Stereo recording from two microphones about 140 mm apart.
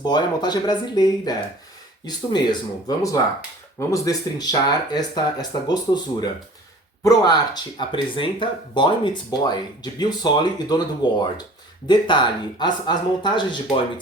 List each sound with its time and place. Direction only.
0.0 s speech: 30° left (ahead or behind)